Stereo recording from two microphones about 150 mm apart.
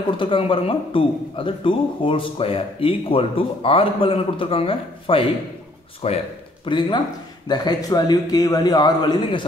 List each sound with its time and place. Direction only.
0.2 s a man's voice: 35° left (ahead or behind)